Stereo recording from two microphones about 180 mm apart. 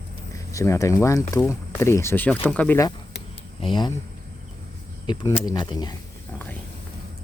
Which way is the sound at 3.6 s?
25° left (ahead or behind).